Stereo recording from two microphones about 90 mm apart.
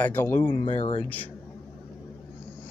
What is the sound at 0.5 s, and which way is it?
Speech, 80° left.